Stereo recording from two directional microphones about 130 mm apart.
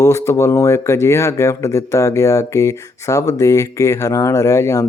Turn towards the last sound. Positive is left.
turn(degrees=25)  # may be behind; listen again after turning